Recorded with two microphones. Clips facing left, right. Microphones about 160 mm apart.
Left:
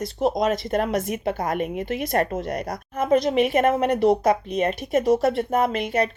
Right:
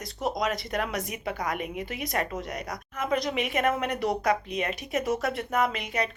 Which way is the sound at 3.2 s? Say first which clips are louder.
Left 7 dB; 35° left (ahead or behind).